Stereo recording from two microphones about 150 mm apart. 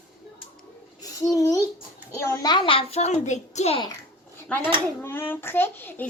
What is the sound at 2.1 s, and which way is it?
A child's voice, 20° left (ahead or behind).